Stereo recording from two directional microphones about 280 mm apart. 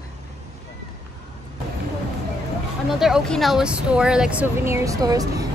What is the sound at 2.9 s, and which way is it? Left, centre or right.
Speech, centre.